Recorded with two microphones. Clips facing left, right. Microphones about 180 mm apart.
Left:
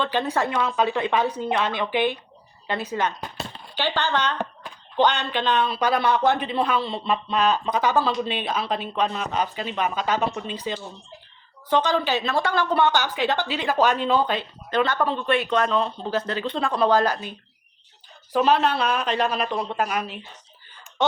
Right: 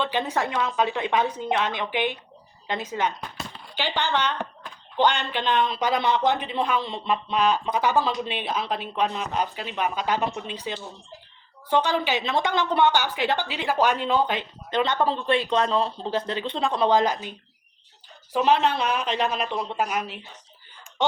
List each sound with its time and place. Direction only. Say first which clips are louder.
0.0 s speech: left 2 dB; 15° right (ahead or behind)
18.3 s speech: left 1 dB; 15° right (ahead or behind)
19.0 s speech: left 2 dB; 10° left (ahead or behind)
19.7 s speech: left 1 dB; 5° right (ahead or behind)